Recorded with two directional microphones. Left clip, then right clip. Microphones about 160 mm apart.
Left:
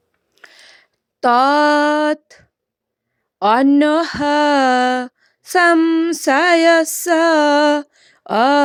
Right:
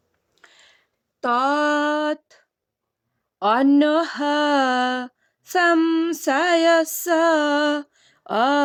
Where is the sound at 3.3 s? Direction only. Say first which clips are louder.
Left 4 dB; 30° left (ahead or behind).